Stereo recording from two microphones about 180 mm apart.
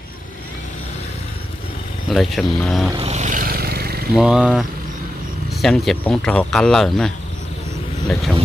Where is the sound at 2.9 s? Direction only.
35° right (ahead or behind); by 4.1 s 60° right (ahead or behind).